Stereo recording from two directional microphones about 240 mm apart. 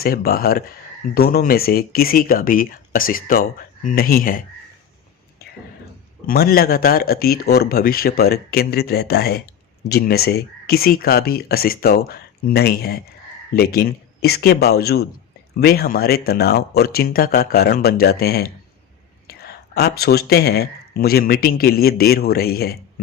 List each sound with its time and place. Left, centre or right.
0.0 s speech: left
6.2 s speech: left